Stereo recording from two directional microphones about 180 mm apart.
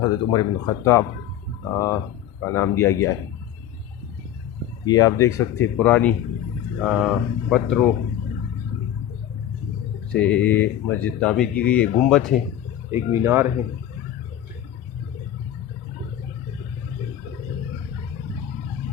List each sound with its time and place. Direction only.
0.0 s speech: 25° left (ahead or behind)
4.9 s speech: 20° left (ahead or behind); by 7.9 s centre (ahead or behind)
10.1 s speech: 5° left (ahead or behind)
12.9 s speech: 15° right (ahead or behind)